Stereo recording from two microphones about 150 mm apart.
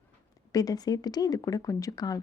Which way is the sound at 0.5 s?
25° left (ahead or behind).